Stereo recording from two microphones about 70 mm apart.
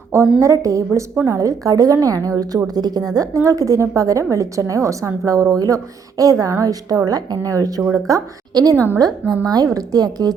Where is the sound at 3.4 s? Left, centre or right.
Right.